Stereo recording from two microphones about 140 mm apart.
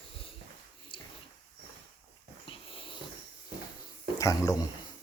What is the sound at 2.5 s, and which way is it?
Dog, 40° left (ahead or behind).